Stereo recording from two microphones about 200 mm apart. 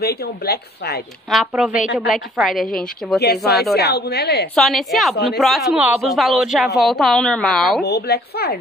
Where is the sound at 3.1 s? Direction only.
55° left (ahead or behind).